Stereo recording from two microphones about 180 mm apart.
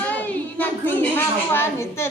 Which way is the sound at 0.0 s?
10° left (ahead or behind).